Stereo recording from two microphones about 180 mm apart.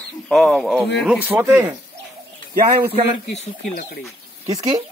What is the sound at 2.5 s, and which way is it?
Speech, 55° right (ahead or behind).